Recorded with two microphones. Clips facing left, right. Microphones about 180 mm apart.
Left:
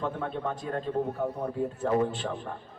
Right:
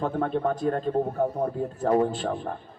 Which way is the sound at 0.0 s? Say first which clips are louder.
Right 6 dB; 45° right (ahead or behind).